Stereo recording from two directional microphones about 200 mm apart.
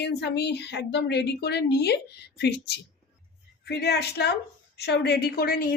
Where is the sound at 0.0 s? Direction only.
55° left (ahead or behind).